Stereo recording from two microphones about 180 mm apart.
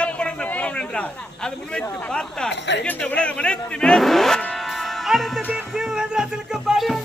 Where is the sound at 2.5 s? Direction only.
75° left (ahead or behind).